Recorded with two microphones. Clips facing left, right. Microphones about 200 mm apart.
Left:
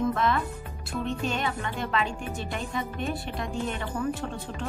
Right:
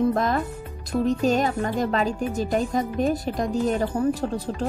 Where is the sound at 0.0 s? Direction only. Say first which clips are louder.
Right 4 dB; 40° right (ahead or behind).